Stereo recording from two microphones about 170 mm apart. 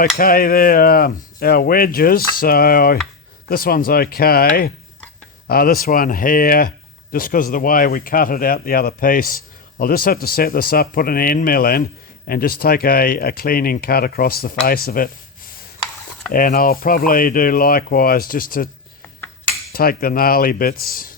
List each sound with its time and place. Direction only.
0.2 s speech: 60° left (ahead or behind)
16.3 s speech: 55° left (ahead or behind)
19.7 s speech: 60° left (ahead or behind)